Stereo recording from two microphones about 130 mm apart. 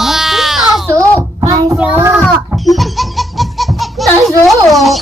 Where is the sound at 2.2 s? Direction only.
Centre (ahead or behind).